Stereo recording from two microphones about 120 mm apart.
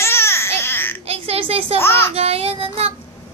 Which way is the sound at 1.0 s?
55° right (ahead or behind).